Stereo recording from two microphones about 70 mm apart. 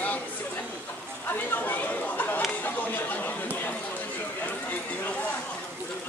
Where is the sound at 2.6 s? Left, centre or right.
Left.